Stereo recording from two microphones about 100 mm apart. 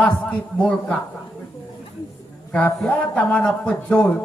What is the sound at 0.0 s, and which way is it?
Speech, 10° left (ahead or behind).